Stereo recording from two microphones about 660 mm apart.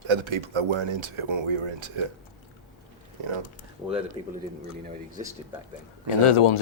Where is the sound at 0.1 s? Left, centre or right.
Right.